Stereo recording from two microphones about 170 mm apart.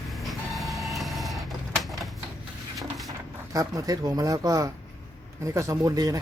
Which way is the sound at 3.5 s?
20° right (ahead or behind).